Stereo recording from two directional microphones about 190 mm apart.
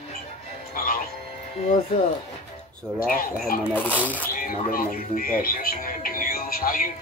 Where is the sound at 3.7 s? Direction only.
10° left (ahead or behind).